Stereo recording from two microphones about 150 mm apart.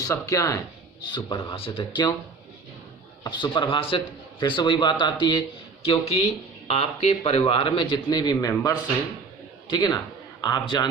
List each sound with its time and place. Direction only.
0.1 s speech: 20° left (ahead or behind)
1.1 s a man's voice: 30° left (ahead or behind)
3.2 s a man's voice: 30° left (ahead or behind)
5.8 s a man's voice: 40° left (ahead or behind)